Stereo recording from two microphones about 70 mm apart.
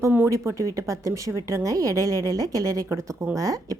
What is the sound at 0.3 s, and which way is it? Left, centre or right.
A woman's voice, right.